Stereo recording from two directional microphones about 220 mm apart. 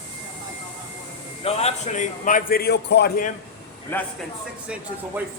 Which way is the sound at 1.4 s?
30° left (ahead or behind).